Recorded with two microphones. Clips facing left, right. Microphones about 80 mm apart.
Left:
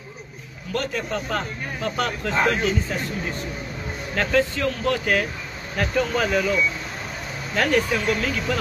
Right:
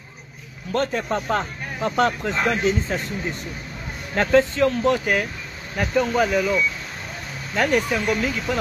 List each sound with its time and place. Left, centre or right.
0.7 s speech: right
4.1 s speech: right
6.3 s speech: centre